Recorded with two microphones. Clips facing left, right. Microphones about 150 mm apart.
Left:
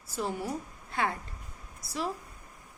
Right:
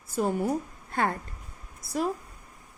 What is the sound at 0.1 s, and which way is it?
A woman's voice, 50° right (ahead or behind).